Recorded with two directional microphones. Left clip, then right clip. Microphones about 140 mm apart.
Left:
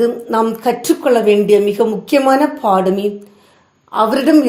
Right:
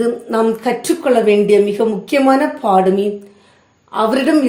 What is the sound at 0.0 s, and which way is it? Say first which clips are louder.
A woman's voice: left 1 dB; 35° left (ahead or behind).